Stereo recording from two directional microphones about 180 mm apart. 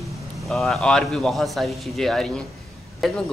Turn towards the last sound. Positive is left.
turn(degrees=0)  # may be behind; listen again after turning